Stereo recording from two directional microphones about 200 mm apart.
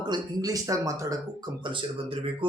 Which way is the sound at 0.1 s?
20° right (ahead or behind).